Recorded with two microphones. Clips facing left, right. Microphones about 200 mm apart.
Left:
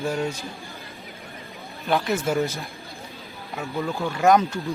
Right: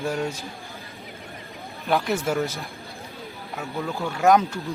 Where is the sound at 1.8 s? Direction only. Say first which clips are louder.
Even; centre (ahead or behind).